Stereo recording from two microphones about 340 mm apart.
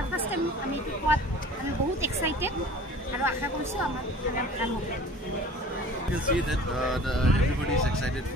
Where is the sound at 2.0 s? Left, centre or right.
Centre.